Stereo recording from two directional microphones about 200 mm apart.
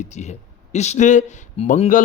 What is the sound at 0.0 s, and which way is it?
Speech, 35° left (ahead or behind).